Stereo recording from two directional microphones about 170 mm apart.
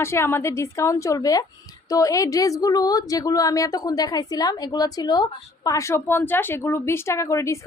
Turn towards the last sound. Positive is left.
turn(degrees=15)  # may be behind; listen again after turning